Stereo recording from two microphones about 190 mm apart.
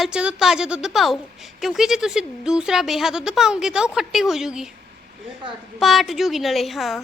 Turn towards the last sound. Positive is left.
turn(degrees=0)  # may be behind; listen again after turning